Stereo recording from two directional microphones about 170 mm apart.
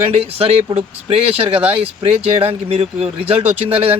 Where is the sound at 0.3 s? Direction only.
35° right (ahead or behind).